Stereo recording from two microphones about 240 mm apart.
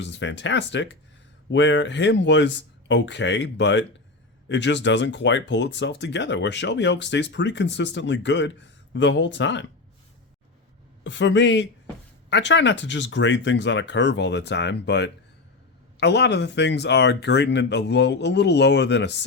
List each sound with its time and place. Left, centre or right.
0.0 s speech: left
11.0 s speech: left